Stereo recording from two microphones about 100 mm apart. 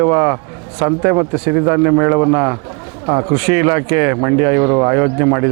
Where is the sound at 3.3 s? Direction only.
25° right (ahead or behind).